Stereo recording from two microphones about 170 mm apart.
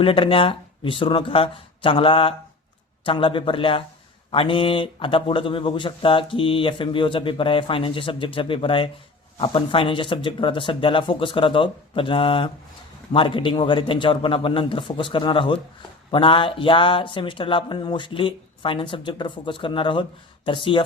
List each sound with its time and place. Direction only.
0.0 s speech: 30° left (ahead or behind)